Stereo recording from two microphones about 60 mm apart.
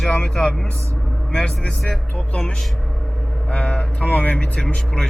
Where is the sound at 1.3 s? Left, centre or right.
Centre.